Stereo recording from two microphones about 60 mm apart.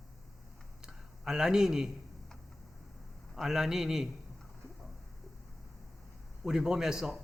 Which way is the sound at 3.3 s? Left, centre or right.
Centre.